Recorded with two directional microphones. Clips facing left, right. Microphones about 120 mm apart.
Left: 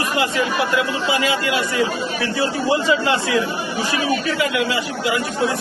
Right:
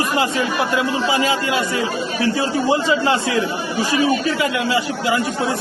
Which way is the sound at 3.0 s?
25° right (ahead or behind).